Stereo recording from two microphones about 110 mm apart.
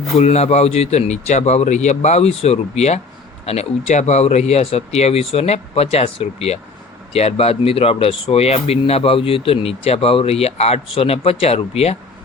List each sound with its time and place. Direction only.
0.2 s speech: 85° left
3.4 s speech: 70° left (ahead or behind)